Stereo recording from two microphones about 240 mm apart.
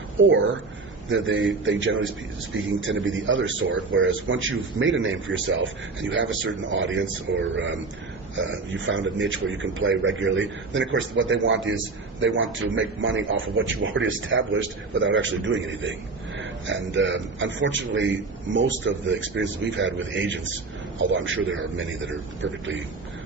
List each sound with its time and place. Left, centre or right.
1.1 s a man's voice: right